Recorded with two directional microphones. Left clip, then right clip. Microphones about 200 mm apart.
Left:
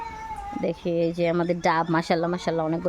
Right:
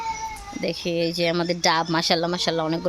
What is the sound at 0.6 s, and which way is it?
A woman's voice, 5° left (ahead or behind).